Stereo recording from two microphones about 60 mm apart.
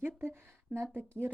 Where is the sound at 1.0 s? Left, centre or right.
Right.